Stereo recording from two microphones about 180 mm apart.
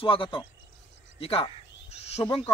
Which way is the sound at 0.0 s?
30° left (ahead or behind).